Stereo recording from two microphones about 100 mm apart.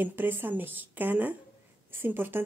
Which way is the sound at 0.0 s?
20° right (ahead or behind).